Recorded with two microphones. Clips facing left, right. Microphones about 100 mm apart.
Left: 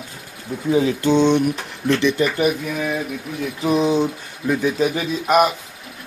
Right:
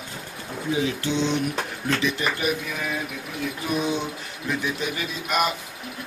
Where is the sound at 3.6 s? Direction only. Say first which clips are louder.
Left 9 dB; 30° left (ahead or behind).